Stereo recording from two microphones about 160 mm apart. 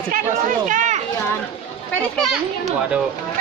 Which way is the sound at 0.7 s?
50° right (ahead or behind).